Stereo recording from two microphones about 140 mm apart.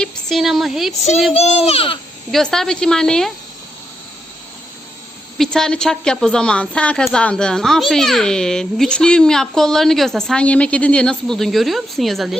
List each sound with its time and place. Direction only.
0.0 s a woman's voice: centre (ahead or behind)
1.3 s a child's voice: 45° left (ahead or behind)
2.3 s a woman's voice: 5° left (ahead or behind)
5.4 s a woman's voice: 5° left (ahead or behind)